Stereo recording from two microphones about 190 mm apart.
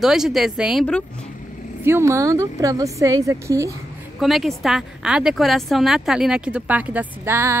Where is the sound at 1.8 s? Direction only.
15° right (ahead or behind).